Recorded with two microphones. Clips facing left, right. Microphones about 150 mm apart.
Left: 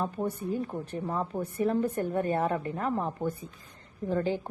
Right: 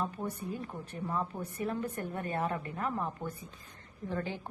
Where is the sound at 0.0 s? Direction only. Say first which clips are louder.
Left 5 dB; 20° left (ahead or behind).